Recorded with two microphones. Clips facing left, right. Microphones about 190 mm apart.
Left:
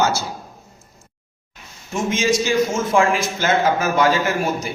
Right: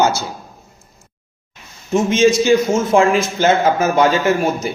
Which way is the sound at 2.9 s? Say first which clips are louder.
Right 3 dB; 20° right (ahead or behind).